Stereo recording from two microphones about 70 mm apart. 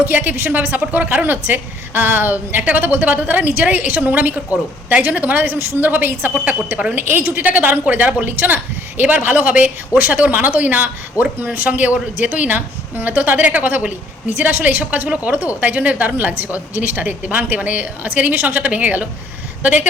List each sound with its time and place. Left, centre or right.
0.0 s a woman's voice: right